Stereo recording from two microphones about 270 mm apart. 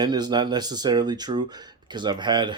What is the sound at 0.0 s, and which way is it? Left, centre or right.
Speech, centre.